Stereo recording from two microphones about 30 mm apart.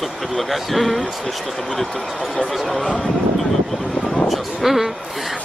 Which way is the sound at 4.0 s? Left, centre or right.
Left.